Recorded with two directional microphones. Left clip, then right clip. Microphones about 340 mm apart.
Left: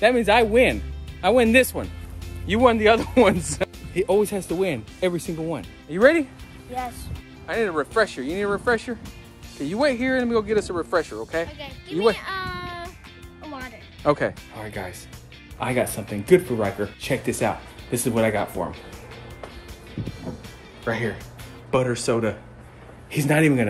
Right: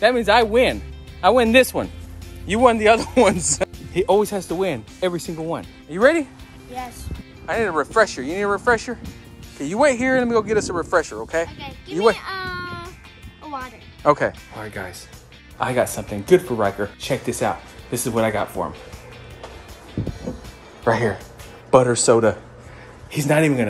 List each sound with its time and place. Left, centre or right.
0.0 s speech: centre
13.6 s music: centre
15.6 s speech: centre
20.8 s speech: centre